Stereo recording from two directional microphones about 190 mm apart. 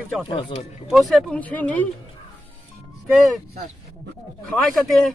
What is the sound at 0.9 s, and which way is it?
Speech, centre (ahead or behind).